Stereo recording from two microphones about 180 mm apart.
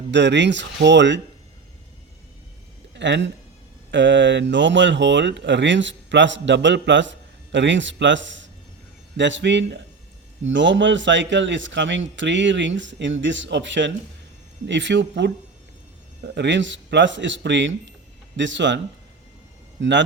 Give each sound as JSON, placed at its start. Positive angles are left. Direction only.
{"t": 0.1, "sound": "speech", "side_deg": -80}
{"t": 2.9, "sound": "a man's voice", "side_deg": -80}
{"t": 16.2, "sound": "a man's voice", "side_deg": -75}
{"t": 19.8, "sound": "a man's voice", "side_deg": -90}